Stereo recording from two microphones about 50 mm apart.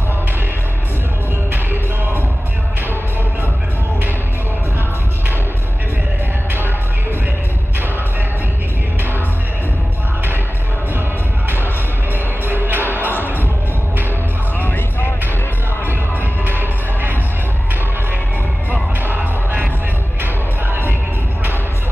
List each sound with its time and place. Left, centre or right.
12.4 s music: right
16.4 s music: right
18.7 s music: right